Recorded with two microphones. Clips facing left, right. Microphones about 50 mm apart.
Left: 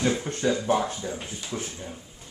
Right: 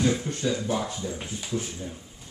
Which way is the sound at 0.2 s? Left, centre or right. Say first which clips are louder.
Left 2 dB; left.